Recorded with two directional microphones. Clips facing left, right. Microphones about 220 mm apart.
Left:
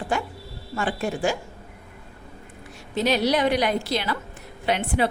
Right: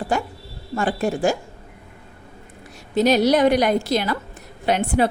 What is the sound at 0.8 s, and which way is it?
Speech, 45° right (ahead or behind).